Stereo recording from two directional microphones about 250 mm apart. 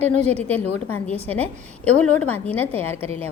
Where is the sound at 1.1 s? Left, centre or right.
Centre.